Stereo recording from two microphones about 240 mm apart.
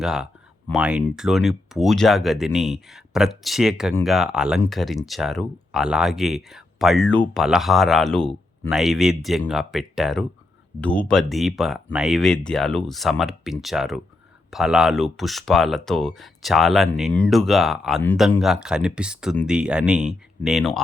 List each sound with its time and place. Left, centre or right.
0.0 s speech: centre